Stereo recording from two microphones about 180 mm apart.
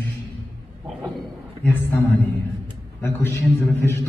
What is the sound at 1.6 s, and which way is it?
A man's voice, 10° left (ahead or behind).